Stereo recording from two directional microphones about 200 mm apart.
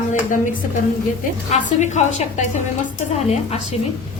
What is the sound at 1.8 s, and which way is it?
Speech, 35° left (ahead or behind).